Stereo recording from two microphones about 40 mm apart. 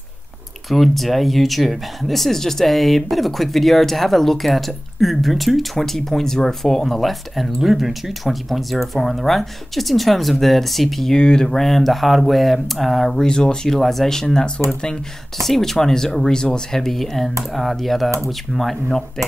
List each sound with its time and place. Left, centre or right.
0.7 s speech: centre
5.8 s speech: centre
11.1 s speech: centre
13.2 s speech: centre
13.7 s speech: centre
15.4 s speech: centre